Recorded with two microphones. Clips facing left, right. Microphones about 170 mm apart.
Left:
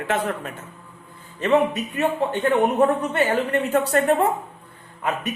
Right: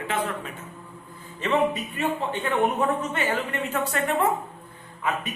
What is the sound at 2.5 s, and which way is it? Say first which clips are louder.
Speech: left 4 dB; 40° left (ahead or behind).